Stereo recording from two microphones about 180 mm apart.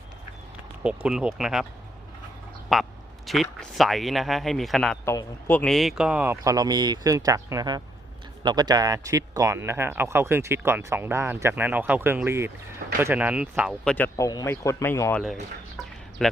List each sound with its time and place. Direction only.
0.8 s speech: 5° right (ahead or behind)
2.7 s speech: centre (ahead or behind)
5.0 s speech: 10° left (ahead or behind); by 13.7 s 5° right (ahead or behind)
13.8 s speech: 10° left (ahead or behind)
16.2 s speech: centre (ahead or behind)